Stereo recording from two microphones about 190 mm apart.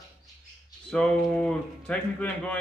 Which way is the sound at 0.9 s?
5° left (ahead or behind).